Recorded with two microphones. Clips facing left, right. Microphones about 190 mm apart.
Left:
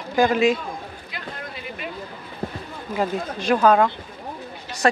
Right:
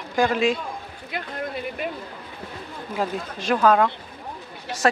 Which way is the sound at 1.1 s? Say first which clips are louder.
Right 9 dB; 55° right (ahead or behind).